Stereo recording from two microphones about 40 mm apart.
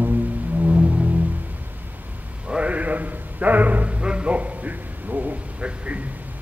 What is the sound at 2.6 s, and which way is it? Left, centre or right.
Music, right.